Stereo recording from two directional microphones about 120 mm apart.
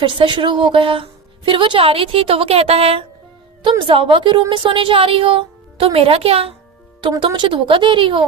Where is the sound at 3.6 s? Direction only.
45° right (ahead or behind).